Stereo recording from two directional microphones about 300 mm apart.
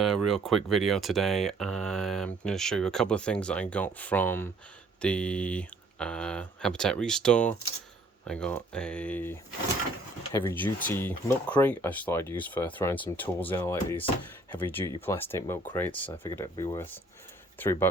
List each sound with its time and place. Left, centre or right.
0.0 s speech: centre
10.3 s speech: centre